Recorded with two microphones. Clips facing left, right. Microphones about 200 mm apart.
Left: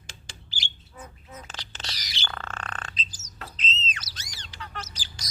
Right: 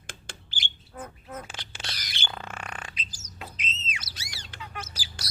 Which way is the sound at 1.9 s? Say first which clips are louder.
Even; 55° right (ahead or behind).